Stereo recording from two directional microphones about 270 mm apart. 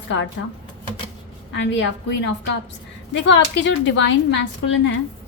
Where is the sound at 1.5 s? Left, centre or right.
Left.